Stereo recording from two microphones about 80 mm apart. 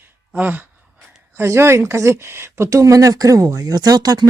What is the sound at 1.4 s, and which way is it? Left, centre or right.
Speech, right.